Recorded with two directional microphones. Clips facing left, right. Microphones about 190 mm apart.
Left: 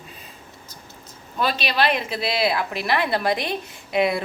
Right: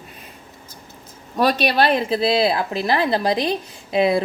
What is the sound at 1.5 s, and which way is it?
A woman's voice, 40° right (ahead or behind).